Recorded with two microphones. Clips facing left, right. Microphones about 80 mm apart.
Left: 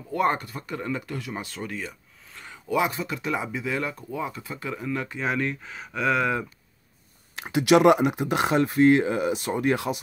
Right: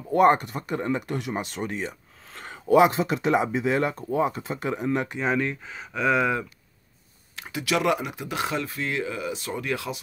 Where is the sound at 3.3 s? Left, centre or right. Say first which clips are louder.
Right 7 dB; right.